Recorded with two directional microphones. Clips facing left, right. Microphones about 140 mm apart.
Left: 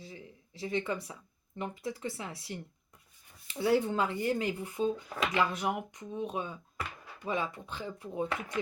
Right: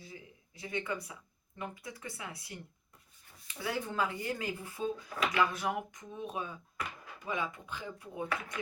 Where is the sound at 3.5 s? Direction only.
30° left (ahead or behind).